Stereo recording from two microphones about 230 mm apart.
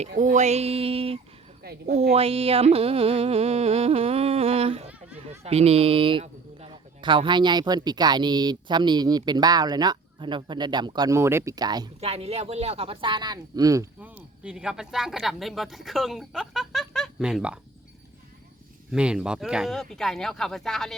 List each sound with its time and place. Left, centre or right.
0.1 s music: right
1.6 s speech: right
2.1 s music: right
5.3 s speech: right; by 17.6 s centre
18.9 s speech: centre